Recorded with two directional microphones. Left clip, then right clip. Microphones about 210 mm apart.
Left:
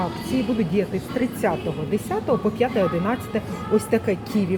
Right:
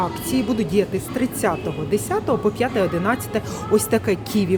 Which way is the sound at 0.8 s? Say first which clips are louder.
Right 3 dB; 20° right (ahead or behind).